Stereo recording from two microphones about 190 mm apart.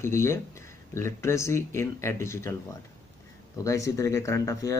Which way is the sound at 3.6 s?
15° left (ahead or behind).